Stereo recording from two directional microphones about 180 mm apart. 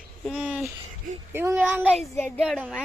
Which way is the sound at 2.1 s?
10° left (ahead or behind).